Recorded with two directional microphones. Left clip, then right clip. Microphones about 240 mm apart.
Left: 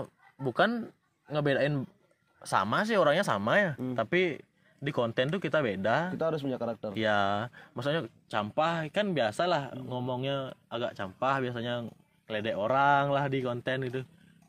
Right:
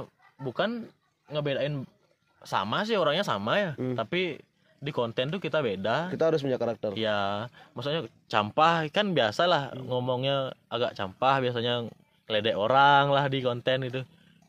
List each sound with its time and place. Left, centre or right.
0.0 s a man's voice: centre
2.4 s speech: centre
6.1 s speech: right
7.0 s speech: centre
8.3 s speech: right